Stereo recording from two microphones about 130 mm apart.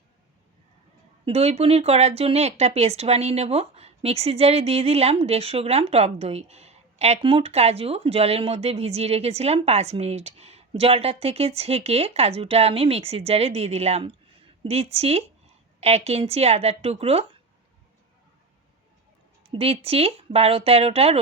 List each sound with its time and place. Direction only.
1.2 s speech: 50° right (ahead or behind)
19.4 s speech: 50° right (ahead or behind)